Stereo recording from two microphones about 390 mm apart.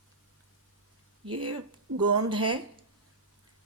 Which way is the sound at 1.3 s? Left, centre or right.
Right.